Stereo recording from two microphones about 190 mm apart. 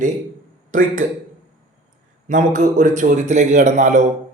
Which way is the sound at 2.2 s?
45° right (ahead or behind).